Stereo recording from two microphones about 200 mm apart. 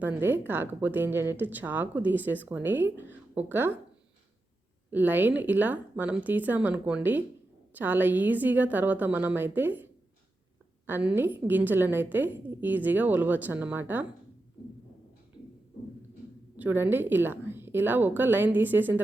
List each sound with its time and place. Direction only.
0.0 s a woman's voice: 10° right (ahead or behind)
4.9 s a woman's voice: 10° right (ahead or behind)
10.8 s a woman's voice: 10° right (ahead or behind)
16.6 s a woman's voice: 10° right (ahead or behind)